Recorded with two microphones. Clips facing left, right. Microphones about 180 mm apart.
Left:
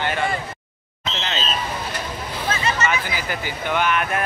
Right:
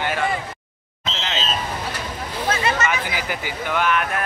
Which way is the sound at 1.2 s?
5° right (ahead or behind).